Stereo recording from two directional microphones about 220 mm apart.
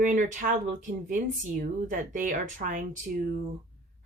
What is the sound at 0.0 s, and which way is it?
A woman's voice, 35° right (ahead or behind).